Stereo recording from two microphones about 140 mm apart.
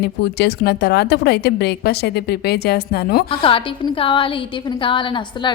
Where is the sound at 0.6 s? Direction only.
90° left.